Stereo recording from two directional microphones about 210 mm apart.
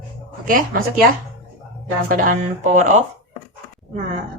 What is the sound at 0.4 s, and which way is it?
Speech, 40° right (ahead or behind).